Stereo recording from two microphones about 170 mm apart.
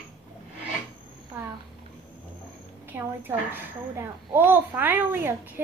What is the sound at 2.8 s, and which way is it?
A child's voice, 10° right (ahead or behind).